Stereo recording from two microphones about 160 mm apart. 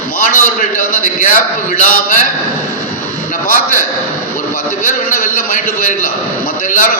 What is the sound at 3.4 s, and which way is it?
Speech, 60° left (ahead or behind).